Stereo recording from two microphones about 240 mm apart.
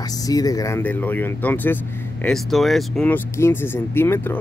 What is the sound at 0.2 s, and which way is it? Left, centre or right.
Speech, centre.